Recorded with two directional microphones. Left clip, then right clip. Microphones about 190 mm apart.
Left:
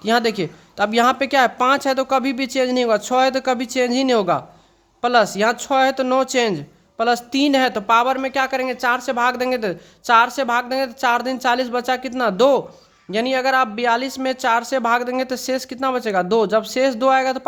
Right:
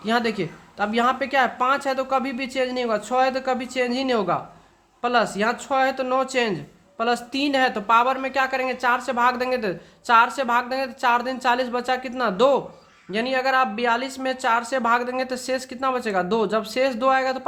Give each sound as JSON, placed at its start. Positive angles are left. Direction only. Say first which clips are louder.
{"t": 0.0, "sound": "speech", "louder": "left 5 dB", "side_deg": 35}